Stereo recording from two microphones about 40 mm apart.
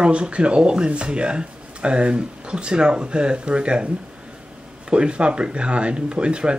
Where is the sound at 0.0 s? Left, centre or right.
Right.